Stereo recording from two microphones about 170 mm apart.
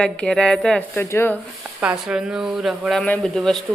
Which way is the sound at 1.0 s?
15° left (ahead or behind).